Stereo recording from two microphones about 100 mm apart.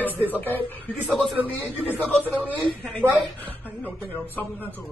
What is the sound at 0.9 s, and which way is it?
A man's voice, 15° right (ahead or behind).